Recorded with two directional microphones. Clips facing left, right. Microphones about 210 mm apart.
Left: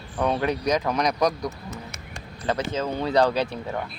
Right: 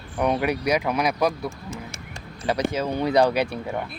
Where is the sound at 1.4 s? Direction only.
30° right (ahead or behind).